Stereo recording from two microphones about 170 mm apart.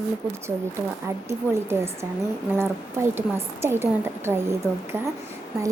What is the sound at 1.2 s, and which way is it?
A woman's voice, 15° right (ahead or behind).